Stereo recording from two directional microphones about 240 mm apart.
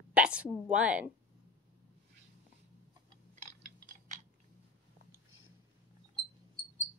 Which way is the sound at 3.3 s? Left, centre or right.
Right.